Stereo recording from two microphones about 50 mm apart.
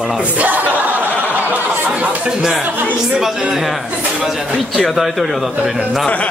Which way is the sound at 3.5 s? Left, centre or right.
Centre.